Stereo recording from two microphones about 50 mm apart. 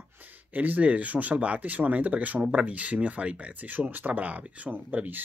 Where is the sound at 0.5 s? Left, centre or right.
Right.